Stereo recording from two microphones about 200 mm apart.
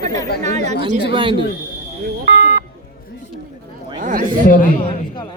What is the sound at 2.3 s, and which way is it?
Beep, 50° right (ahead or behind).